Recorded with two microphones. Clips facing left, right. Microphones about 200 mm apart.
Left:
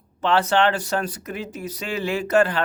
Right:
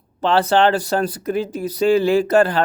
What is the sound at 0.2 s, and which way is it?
Speech, 35° right (ahead or behind).